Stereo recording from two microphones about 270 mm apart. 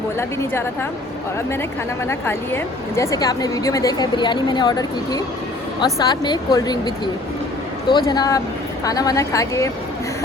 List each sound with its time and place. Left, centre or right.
0.2 s a woman's voice: centre
2.0 s a woman's voice: centre